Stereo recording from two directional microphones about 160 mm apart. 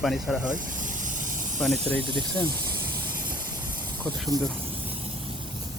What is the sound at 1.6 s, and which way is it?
Speech, 5° left (ahead or behind).